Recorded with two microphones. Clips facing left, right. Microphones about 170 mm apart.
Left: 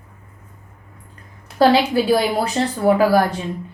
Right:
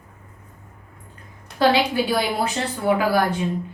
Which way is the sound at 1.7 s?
40° left (ahead or behind).